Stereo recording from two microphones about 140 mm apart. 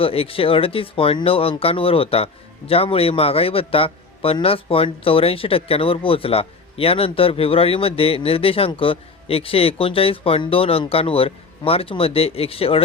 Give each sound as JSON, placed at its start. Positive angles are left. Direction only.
{"t": 0.0, "sound": "speech", "side_deg": 40}